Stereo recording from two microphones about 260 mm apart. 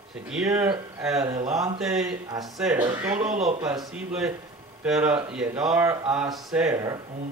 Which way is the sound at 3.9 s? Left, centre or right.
Centre.